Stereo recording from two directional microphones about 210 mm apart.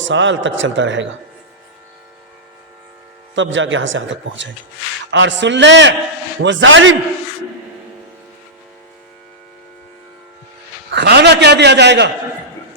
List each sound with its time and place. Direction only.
0.0 s a man's voice: 60° right (ahead or behind)
3.3 s a man's voice: 60° right (ahead or behind)
10.9 s a man's voice: 55° right (ahead or behind)